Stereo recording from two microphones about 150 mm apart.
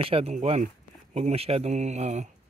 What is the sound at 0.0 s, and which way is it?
Speech, 40° right (ahead or behind).